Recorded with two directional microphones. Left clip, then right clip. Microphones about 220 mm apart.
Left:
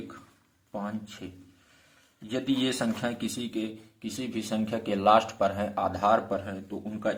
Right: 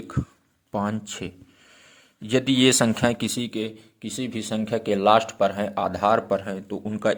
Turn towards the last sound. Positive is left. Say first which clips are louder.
# right 7 dB
turn(degrees=-50)  # may be behind; listen again after turning